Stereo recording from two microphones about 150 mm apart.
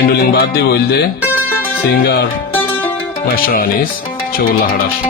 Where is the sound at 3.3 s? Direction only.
75° left (ahead or behind).